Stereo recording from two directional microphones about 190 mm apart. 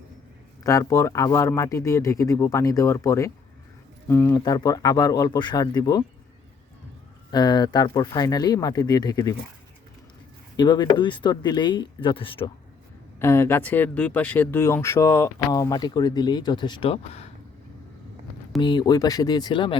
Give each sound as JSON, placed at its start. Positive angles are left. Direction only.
{"t": 0.6, "sound": "speech", "side_deg": 15}
{"t": 7.3, "sound": "speech", "side_deg": 20}
{"t": 10.6, "sound": "speech", "side_deg": 25}
{"t": 13.1, "sound": "speech", "side_deg": 15}
{"t": 18.6, "sound": "speech", "side_deg": 25}